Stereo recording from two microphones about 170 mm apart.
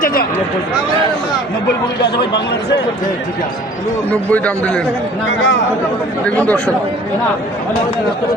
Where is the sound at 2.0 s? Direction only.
70° left (ahead or behind).